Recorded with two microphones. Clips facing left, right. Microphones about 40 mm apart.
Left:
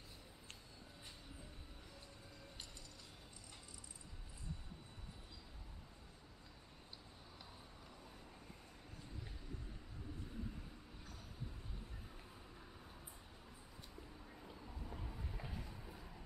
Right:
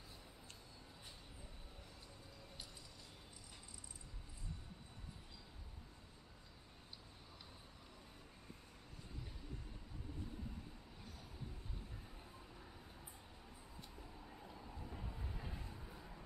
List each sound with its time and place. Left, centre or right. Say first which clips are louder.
14.4 s train: even; centre
15.8 s vehicle: even; centre